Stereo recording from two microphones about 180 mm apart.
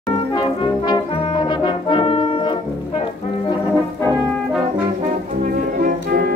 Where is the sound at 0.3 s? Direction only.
25° left (ahead or behind).